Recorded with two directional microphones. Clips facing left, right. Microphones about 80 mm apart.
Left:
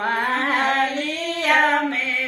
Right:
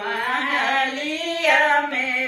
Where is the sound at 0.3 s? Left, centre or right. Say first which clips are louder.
Right 1 dB; left.